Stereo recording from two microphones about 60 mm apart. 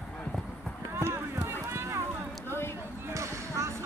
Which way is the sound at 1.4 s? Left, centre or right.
Right.